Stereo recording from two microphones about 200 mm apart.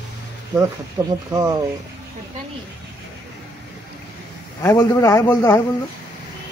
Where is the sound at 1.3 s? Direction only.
15° right (ahead or behind).